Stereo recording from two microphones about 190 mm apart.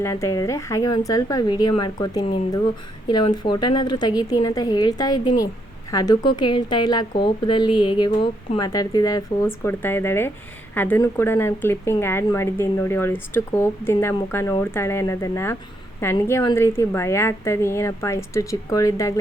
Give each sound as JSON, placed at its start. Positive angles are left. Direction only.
{"t": 0.0, "sound": "a woman's voice", "side_deg": 15}